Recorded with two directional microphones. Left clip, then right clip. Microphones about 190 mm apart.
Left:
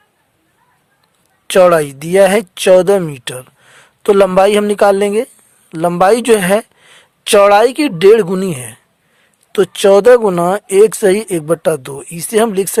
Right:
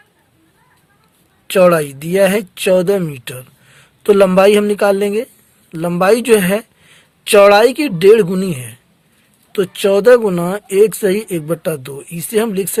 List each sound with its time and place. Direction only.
1.5 s speech: 50° left (ahead or behind)